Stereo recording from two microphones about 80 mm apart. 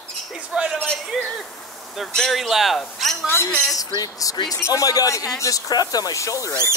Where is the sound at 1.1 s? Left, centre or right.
Centre.